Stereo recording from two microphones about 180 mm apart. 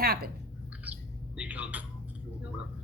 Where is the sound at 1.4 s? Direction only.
5° right (ahead or behind).